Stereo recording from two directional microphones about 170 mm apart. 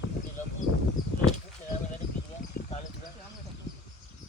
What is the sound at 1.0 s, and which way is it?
Speech, 25° left (ahead or behind).